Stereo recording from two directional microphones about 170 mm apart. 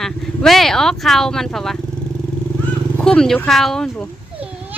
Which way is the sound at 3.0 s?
5° left (ahead or behind).